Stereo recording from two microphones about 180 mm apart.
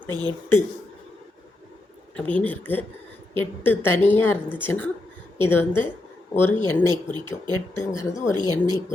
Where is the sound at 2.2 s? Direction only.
10° left (ahead or behind).